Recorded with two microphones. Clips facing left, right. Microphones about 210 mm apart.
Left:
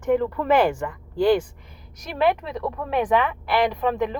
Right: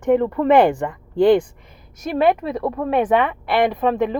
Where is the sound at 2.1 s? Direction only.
50° right (ahead or behind).